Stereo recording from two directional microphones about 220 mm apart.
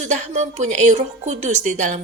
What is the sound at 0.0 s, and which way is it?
A woman's voice, 35° right (ahead or behind).